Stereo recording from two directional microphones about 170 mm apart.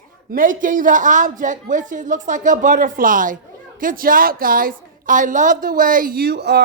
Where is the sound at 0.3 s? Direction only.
55° right (ahead or behind).